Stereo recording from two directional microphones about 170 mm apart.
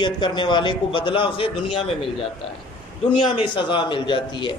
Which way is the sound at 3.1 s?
30° left (ahead or behind).